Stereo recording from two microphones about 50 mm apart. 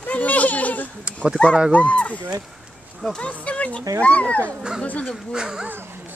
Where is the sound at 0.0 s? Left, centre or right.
Left.